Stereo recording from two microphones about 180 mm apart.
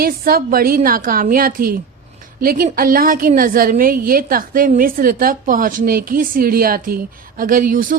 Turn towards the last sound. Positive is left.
turn(degrees=-50)  # may be behind; listen again after turning